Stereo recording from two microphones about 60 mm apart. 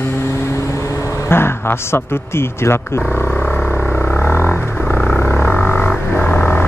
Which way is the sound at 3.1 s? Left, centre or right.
Left.